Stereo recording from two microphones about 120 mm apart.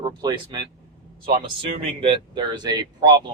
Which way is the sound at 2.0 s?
45° right (ahead or behind).